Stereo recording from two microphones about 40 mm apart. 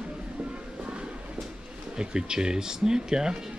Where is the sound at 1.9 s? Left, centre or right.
Centre.